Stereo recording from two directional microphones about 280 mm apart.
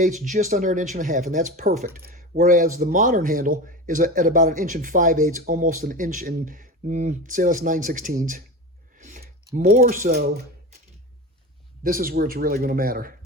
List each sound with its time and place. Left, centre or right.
0.0 s speech: right
11.8 s speech: right